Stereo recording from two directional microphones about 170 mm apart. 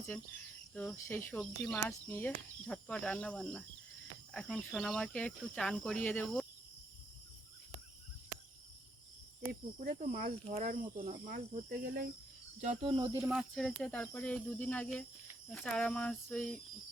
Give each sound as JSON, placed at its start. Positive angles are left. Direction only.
{"t": 0.7, "sound": "speech", "side_deg": 10}
{"t": 9.8, "sound": "speech", "side_deg": -50}
{"t": 12.8, "sound": "speech", "side_deg": -30}
{"t": 13.2, "sound": "speech", "side_deg": 0}